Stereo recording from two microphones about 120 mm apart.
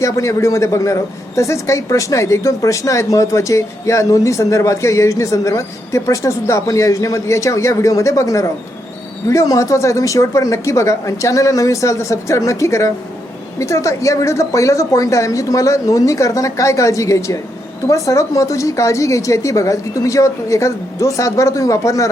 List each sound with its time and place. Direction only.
0.0 s a man's voice: 25° left (ahead or behind)